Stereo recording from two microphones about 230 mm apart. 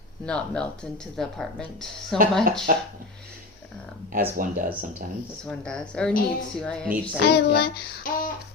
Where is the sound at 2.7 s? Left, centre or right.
Right.